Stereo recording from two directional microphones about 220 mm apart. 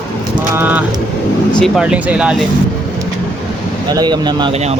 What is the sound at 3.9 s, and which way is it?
Speech, 20° right (ahead or behind).